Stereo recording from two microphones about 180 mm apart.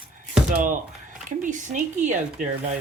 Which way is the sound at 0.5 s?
45° right (ahead or behind).